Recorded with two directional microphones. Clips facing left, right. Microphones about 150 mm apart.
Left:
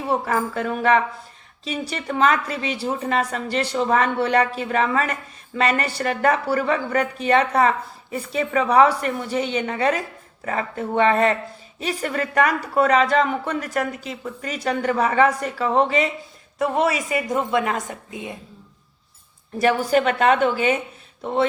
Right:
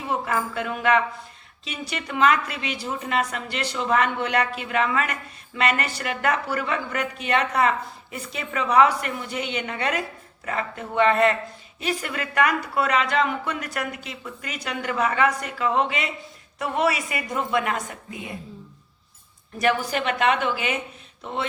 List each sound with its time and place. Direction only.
0.1 s a woman's voice: 35° left (ahead or behind)
19.6 s speech: 40° left (ahead or behind)